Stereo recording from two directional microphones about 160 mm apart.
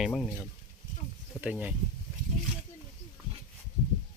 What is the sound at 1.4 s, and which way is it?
Speech, 10° right (ahead or behind).